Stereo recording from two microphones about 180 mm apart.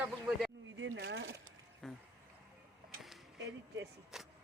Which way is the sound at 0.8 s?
80° right.